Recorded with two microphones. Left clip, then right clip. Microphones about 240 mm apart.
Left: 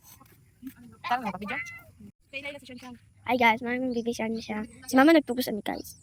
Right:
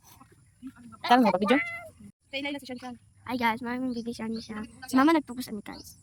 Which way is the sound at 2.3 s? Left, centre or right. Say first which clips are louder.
Right 4 dB; centre.